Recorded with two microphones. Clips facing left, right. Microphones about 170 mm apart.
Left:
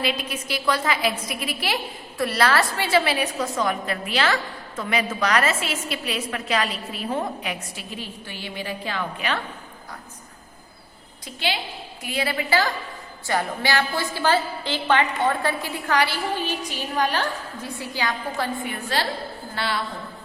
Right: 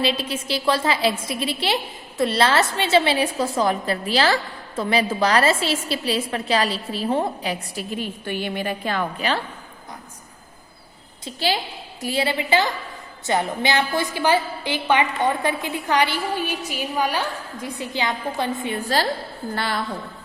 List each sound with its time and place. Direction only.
0.0 s a woman's voice: 30° right (ahead or behind)
7.9 s a woman's voice: 55° right (ahead or behind)
9.1 s a woman's voice: 35° right (ahead or behind)
11.3 s a woman's voice: 35° right (ahead or behind)
19.5 s a woman's voice: 45° right (ahead or behind)